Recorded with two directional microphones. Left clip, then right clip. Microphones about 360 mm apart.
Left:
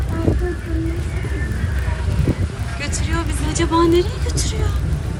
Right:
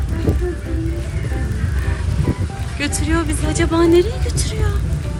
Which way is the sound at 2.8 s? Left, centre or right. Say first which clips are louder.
Right 5 dB; centre.